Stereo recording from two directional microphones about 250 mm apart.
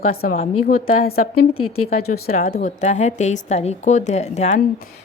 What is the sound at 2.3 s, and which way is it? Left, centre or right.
A woman's voice, left.